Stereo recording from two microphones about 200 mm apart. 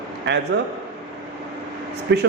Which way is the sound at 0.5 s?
60° right (ahead or behind).